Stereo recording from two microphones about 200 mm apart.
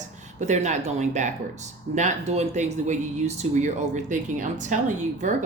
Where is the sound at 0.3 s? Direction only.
35° right (ahead or behind).